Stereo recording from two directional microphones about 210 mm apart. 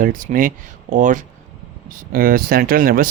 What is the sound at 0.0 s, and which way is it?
Speech, 40° right (ahead or behind).